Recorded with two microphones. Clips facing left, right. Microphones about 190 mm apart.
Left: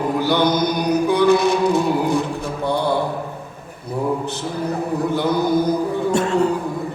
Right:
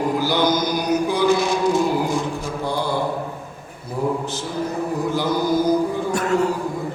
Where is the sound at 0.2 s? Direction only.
60° left (ahead or behind).